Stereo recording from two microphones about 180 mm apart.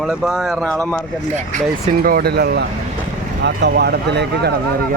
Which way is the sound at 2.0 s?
55° right (ahead or behind).